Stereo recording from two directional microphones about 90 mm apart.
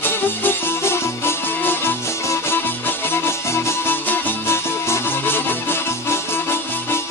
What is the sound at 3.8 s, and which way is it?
Music, 25° left (ahead or behind).